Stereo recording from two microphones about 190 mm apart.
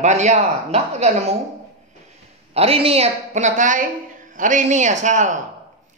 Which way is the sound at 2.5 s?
30° right (ahead or behind).